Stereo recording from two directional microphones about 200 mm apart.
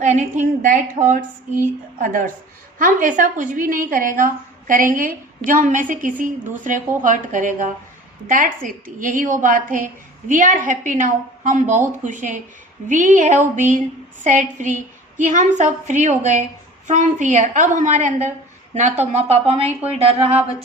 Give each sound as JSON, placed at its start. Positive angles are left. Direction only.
{"t": 0.0, "sound": "a woman's voice", "side_deg": -35}